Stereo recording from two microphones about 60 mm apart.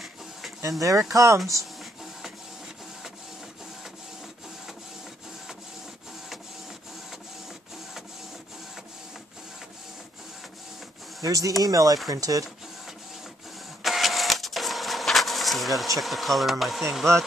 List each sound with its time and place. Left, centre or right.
0.6 s speech: right
11.2 s speech: right
13.8 s printer: centre